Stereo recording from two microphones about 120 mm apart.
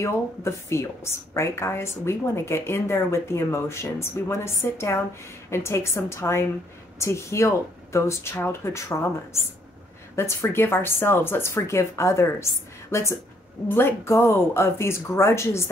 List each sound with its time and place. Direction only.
0.0 s speech: 25° left (ahead or behind)
10.1 s speech: 20° left (ahead or behind)
13.7 s speech: 20° left (ahead or behind)